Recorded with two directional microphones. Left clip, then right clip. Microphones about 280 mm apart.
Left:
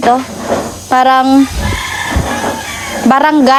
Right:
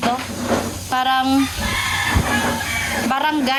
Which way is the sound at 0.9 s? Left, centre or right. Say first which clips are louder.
Left 10 dB; centre.